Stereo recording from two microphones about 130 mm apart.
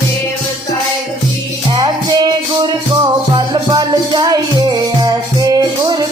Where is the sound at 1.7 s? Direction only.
35° right (ahead or behind).